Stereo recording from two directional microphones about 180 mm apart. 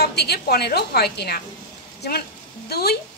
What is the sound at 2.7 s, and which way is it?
Speech, 60° left (ahead or behind).